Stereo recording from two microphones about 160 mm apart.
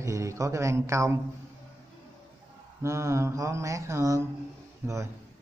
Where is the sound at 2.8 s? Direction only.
20° right (ahead or behind).